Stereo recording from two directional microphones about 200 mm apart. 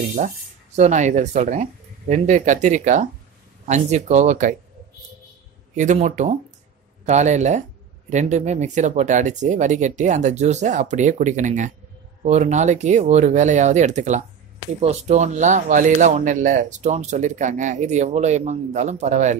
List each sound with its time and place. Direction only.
0.2 s speech: 35° right (ahead or behind)
5.8 s speech: 35° right (ahead or behind)